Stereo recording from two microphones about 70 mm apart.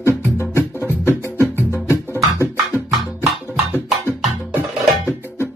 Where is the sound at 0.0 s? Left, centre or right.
Left.